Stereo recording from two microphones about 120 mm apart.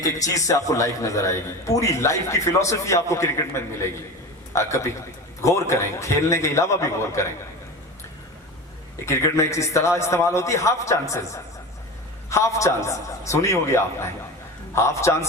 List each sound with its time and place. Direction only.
0.0 s a man's voice: 30° left (ahead or behind)
9.0 s a man's voice: 25° left (ahead or behind)
12.3 s a man's voice: 25° left (ahead or behind)